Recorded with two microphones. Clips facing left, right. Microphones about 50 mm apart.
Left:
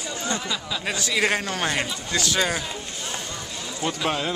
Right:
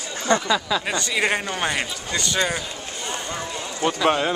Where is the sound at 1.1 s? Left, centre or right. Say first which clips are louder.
Even; centre.